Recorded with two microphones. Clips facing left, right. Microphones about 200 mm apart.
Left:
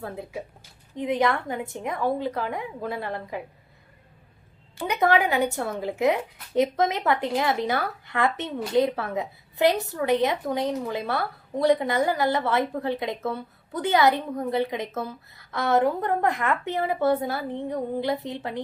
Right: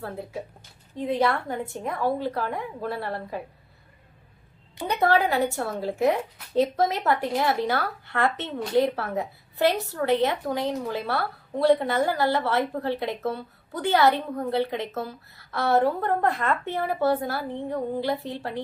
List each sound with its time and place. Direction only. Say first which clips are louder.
0.9 s a woman's voice: even; 20° left (ahead or behind)
4.9 s a woman's voice: even; 15° left (ahead or behind)